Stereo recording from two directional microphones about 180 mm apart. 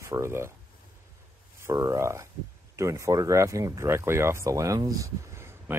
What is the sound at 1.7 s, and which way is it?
Speech, 15° right (ahead or behind).